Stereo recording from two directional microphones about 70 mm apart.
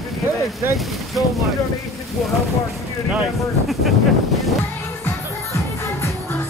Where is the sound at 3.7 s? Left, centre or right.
Centre.